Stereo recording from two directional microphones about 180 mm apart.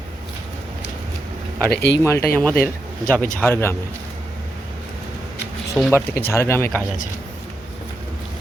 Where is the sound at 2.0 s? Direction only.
15° left (ahead or behind).